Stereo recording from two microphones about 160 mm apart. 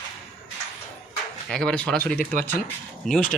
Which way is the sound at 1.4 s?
5° left (ahead or behind).